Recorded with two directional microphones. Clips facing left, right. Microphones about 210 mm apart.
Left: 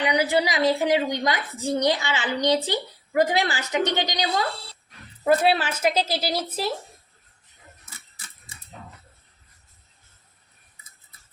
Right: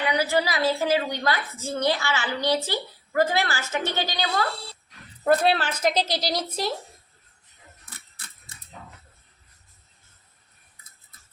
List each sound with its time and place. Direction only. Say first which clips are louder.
0.0 s a woman's voice: left 2 dB; 15° left (ahead or behind)
5.2 s a woman's voice: left 1 dB; 5° left (ahead or behind)